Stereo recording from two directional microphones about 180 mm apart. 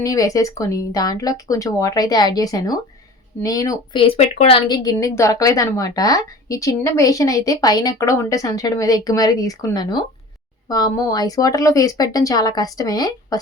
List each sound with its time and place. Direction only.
0.0 s a woman's voice: 20° left (ahead or behind)
4.0 s a woman's voice: 30° left (ahead or behind)